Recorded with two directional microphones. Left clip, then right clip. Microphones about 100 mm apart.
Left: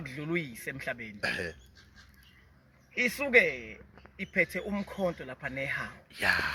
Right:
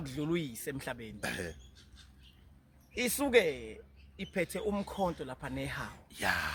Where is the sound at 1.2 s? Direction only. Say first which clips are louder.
Left 6 dB; 30° right (ahead or behind).